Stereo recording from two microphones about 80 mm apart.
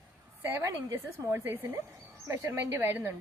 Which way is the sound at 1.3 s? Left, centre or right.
Right.